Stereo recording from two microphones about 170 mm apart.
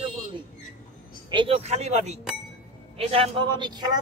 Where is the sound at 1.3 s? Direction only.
30° right (ahead or behind).